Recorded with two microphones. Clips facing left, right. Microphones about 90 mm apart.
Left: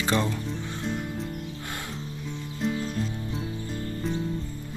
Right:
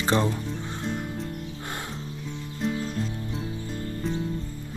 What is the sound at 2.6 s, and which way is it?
Music, centre (ahead or behind).